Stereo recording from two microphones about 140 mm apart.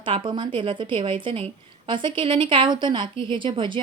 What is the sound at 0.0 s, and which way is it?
A woman's voice, 35° right (ahead or behind).